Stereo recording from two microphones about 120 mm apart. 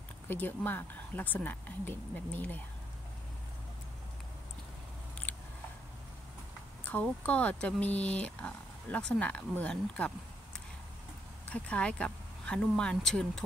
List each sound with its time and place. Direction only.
0.3 s speech: 15° left (ahead or behind)
5.3 s scissors: 15° left (ahead or behind)
6.8 s speech: 10° left (ahead or behind)
11.5 s speech: 10° left (ahead or behind)